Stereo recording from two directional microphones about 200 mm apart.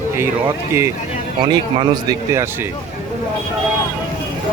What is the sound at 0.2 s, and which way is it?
Speech, 10° right (ahead or behind).